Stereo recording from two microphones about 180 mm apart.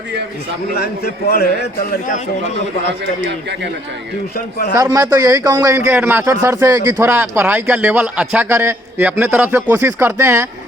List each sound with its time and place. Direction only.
0.8 s a man's voice: 60° left (ahead or behind)
4.7 s a man's voice: 20° right (ahead or behind)